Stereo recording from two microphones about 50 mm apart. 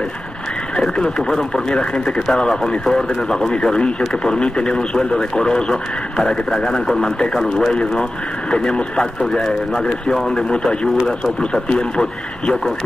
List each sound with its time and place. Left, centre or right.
0.7 s speech: centre